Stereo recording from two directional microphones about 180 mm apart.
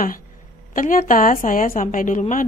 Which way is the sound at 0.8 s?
50° left (ahead or behind).